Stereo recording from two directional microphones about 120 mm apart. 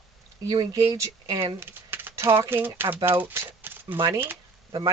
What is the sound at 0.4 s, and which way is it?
Speech, 30° right (ahead or behind).